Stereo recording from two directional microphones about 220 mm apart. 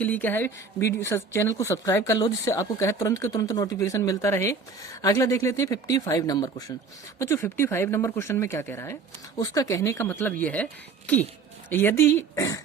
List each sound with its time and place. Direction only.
0.0 s a woman's voice: 5° left (ahead or behind)